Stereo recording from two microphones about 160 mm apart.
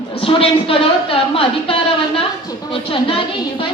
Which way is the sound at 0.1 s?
35° left (ahead or behind).